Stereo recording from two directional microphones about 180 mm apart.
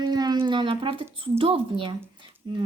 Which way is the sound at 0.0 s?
20° right (ahead or behind).